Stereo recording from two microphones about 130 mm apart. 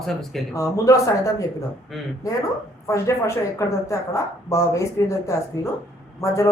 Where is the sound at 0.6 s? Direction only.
25° left (ahead or behind).